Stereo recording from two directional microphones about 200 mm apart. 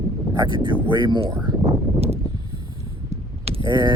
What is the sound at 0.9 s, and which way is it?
Speech, 25° right (ahead or behind).